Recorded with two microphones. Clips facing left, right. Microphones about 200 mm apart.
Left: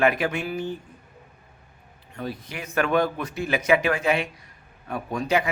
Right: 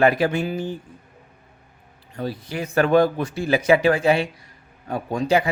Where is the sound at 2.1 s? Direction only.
35° right (ahead or behind).